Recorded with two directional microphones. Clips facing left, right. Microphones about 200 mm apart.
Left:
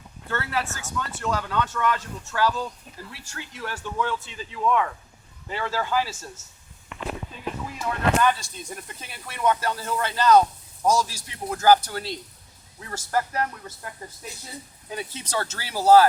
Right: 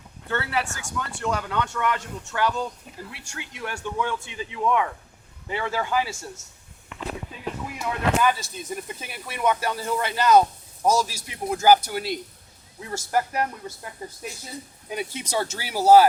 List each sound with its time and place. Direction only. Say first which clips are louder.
0.3 s speech: right 1 dB; 20° right (ahead or behind)
7.8 s speech: left 1 dB; 5° right (ahead or behind)
14.8 s speech: right 3 dB; 15° right (ahead or behind)